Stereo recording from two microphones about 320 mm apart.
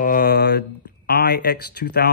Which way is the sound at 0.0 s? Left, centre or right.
Left.